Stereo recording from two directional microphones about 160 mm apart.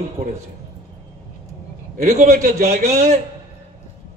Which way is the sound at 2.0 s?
45° right (ahead or behind).